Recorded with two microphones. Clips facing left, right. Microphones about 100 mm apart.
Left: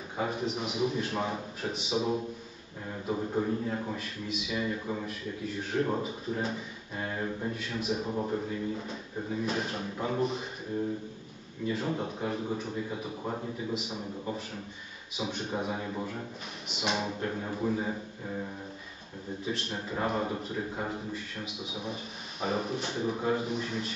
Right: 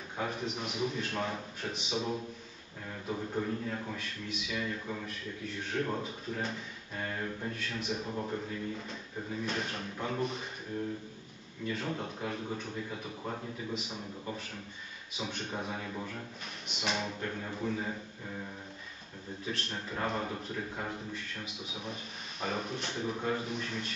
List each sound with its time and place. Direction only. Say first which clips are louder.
0.2 s speech: left 4 dB; 5° left (ahead or behind)
3.2 s a man's voice: left 4 dB; 15° left (ahead or behind)
3.9 s speech: left 4 dB; 5° left (ahead or behind)
4.6 s a man's voice: left 4 dB; 15° left (ahead or behind)
5.6 s a man's voice: left 4 dB; 5° left (ahead or behind)
7.5 s speech: left 4 dB; 5° left (ahead or behind)
11.7 s a man's voice: left 4 dB; 5° left (ahead or behind)
15.1 s a man's voice: left 4 dB; 5° left (ahead or behind)
16.8 s speech: left 3 dB; 5° left (ahead or behind)
17.2 s a man's voice: left 4 dB; 15° left (ahead or behind)
19.4 s a man's voice: left 3 dB; 5° left (ahead or behind)
22.4 s speech: left 4 dB; 5° left (ahead or behind)